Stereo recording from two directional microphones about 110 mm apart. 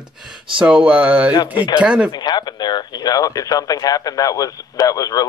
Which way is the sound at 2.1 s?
40° left (ahead or behind).